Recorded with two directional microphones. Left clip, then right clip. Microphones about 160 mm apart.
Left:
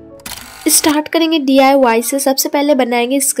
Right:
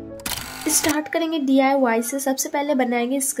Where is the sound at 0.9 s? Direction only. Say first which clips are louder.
Left 9 dB; 25° left (ahead or behind).